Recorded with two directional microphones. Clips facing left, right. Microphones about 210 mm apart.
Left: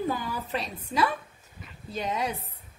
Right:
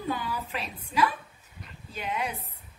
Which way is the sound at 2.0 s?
40° left (ahead or behind).